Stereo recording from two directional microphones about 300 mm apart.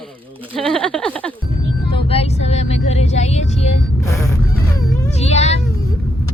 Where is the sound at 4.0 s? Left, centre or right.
Centre.